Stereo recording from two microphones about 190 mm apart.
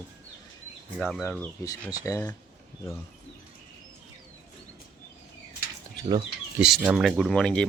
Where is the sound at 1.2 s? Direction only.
10° left (ahead or behind).